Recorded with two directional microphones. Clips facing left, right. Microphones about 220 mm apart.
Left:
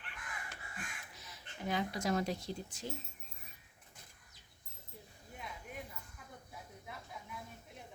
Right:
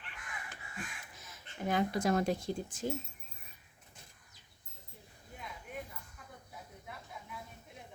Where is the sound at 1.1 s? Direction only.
50° right (ahead or behind).